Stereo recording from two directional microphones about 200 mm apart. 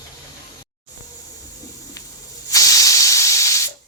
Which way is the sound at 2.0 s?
15° left (ahead or behind).